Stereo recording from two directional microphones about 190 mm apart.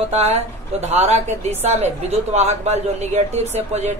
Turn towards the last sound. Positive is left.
turn(degrees=-35)  # may be behind; listen again after turning